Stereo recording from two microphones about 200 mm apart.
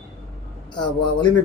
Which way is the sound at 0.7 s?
20° left (ahead or behind).